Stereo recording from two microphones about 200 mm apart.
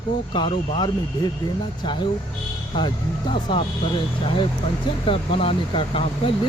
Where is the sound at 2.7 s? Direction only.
25° left (ahead or behind).